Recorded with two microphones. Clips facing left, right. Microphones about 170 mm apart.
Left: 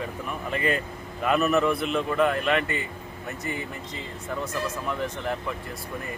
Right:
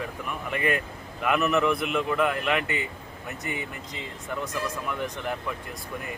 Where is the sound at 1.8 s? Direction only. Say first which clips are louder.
Left 1 dB; 5° right (ahead or behind).